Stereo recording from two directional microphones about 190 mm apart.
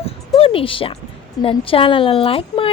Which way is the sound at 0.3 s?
30° left (ahead or behind).